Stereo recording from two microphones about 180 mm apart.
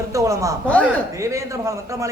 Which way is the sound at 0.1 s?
15° right (ahead or behind).